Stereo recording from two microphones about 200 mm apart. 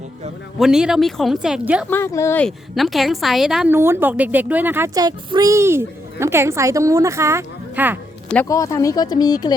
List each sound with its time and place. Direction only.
0.6 s speech: 5° right (ahead or behind)
1.9 s speech: 15° left (ahead or behind); by 7.9 s 10° right (ahead or behind)
8.4 s speech: 15° left (ahead or behind)